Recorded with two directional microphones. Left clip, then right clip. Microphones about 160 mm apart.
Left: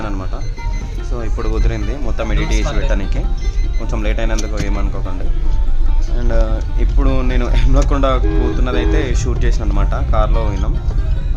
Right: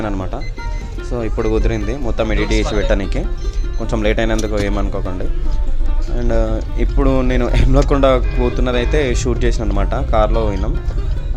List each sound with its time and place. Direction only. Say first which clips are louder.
0.0 s music: right 3 dB; 25° right (ahead or behind)
1.1 s speech: right 6 dB; 30° right (ahead or behind)
4.7 s speech: right 4 dB; 25° right (ahead or behind)
6.1 s speech: right 3 dB; 20° right (ahead or behind)